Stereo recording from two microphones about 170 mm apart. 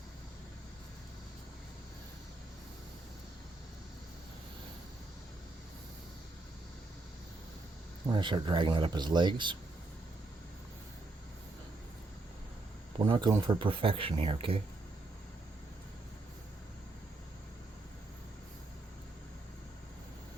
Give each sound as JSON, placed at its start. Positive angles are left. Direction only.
{"t": 8.1, "sound": "speech", "side_deg": -30}
{"t": 13.0, "sound": "speech", "side_deg": -25}